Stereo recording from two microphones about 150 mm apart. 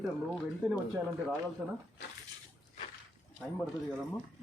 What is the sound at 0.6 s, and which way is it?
Speech, 5° right (ahead or behind).